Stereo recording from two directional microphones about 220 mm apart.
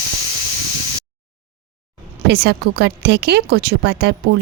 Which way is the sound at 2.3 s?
50° right (ahead or behind).